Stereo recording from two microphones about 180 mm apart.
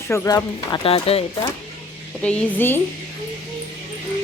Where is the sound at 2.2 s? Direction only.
5° left (ahead or behind).